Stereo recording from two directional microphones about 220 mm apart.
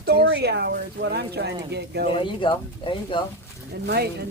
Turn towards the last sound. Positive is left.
turn(degrees=-45)  # may be behind; listen again after turning